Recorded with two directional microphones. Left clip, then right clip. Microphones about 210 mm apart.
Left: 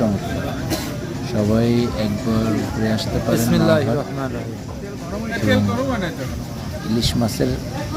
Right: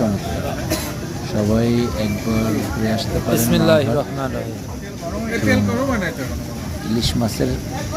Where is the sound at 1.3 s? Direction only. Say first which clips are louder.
Even; centre (ahead or behind).